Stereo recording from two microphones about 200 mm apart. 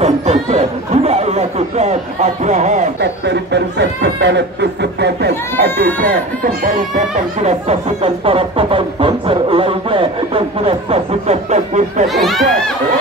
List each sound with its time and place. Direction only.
0.0 s chatter: 30° right (ahead or behind)
2.4 s speech: 35° right (ahead or behind)
3.0 s speech: 60° right (ahead or behind)
5.9 s speech: 45° right (ahead or behind)
12.1 s speech: centre (ahead or behind)